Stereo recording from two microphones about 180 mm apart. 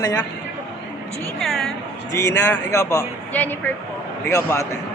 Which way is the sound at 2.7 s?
15° left (ahead or behind).